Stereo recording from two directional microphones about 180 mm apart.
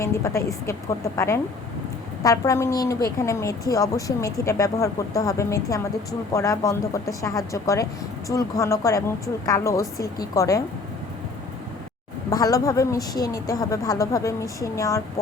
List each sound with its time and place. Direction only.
0.0 s speech: 15° left (ahead or behind)
12.3 s speech: 20° left (ahead or behind)